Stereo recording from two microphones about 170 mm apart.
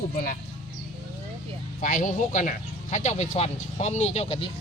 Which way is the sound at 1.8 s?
50° left (ahead or behind).